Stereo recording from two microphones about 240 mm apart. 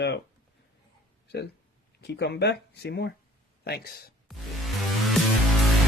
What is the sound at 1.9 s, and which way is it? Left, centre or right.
Speech, left.